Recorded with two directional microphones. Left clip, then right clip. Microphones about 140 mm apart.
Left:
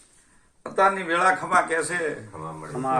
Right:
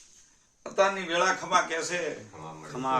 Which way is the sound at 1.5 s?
10° right (ahead or behind).